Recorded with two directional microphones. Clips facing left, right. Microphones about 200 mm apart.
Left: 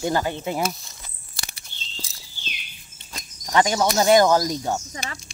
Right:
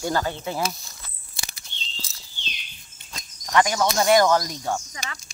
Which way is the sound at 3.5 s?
25° left (ahead or behind).